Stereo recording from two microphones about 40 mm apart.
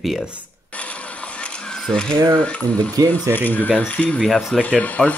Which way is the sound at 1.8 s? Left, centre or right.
Centre.